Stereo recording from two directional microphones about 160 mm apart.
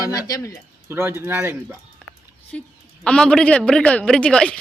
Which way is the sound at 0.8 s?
15° right (ahead or behind).